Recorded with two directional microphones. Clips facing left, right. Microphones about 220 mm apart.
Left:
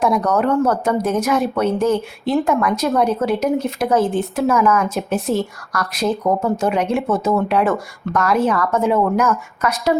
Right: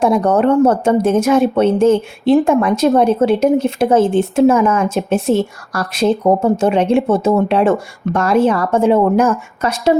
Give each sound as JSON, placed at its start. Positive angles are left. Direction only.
{"t": 0.0, "sound": "speech", "side_deg": -30}